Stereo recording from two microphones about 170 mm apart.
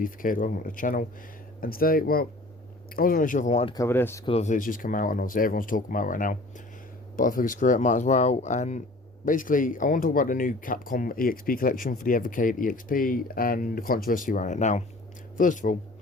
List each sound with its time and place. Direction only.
0.0 s speech: 55° left (ahead or behind)
3.8 s speech: 15° left (ahead or behind)
4.3 s speech: 40° left (ahead or behind)